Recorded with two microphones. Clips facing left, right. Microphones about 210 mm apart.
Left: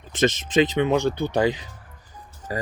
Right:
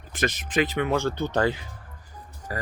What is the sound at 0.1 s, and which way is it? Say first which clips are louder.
Speech: left 6 dB; 25° left (ahead or behind).